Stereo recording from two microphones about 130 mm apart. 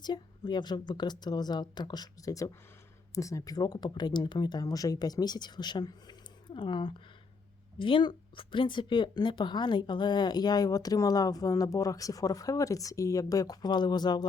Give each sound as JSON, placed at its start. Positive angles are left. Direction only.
{"t": 0.0, "sound": "speech", "side_deg": 35}